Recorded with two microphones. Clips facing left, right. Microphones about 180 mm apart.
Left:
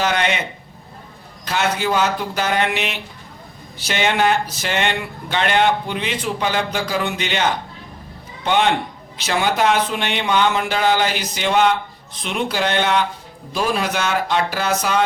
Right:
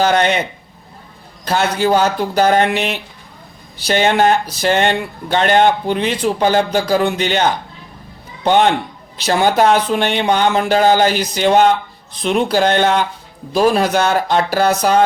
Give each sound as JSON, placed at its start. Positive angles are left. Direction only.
{"t": 0.0, "sound": "speech", "side_deg": -40}
{"t": 1.5, "sound": "speech", "side_deg": -35}
{"t": 8.4, "sound": "speech", "side_deg": -40}